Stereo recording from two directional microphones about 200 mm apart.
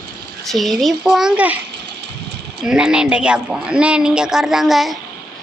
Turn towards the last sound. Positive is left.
turn(degrees=0)  # may be behind; listen again after turning